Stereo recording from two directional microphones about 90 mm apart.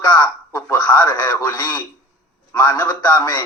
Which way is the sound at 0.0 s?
50° left (ahead or behind).